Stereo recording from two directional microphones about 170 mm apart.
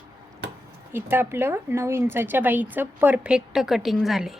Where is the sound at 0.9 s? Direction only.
15° right (ahead or behind).